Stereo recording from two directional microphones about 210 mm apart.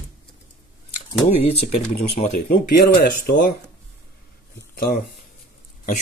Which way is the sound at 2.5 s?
45° left (ahead or behind).